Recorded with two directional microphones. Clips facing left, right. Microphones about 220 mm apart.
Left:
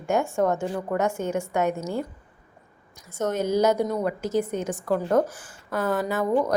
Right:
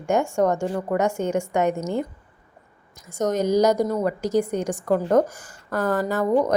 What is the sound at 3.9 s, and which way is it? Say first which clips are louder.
Speech: right 3 dB; centre (ahead or behind).